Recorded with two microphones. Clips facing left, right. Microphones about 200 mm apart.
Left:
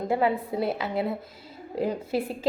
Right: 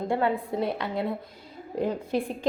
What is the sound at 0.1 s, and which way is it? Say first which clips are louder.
A woman's voice: left 2 dB; 5° left (ahead or behind).